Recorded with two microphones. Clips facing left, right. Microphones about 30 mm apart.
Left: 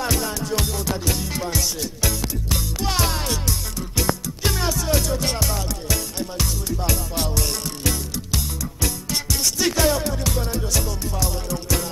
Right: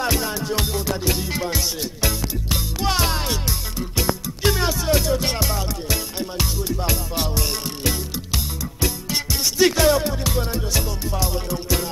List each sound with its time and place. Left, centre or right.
0.0 s music: centre
10.0 s music: right